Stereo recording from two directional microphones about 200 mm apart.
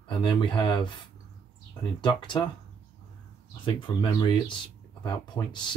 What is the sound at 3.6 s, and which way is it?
Speech, 25° left (ahead or behind).